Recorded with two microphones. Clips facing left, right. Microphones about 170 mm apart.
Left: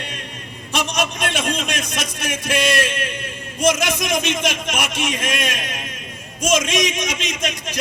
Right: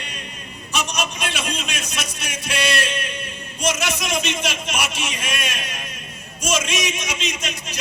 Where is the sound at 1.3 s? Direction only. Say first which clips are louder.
Left 5 dB; 50° left (ahead or behind).